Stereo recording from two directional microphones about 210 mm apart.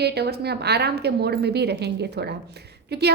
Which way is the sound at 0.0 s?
50° right (ahead or behind).